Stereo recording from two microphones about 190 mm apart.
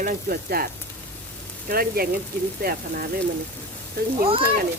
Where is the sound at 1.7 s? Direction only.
50° right (ahead or behind).